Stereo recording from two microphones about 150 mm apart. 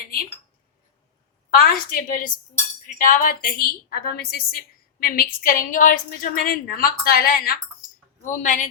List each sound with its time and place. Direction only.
1.5 s a woman's voice: 80° left; by 8.6 s 55° left (ahead or behind)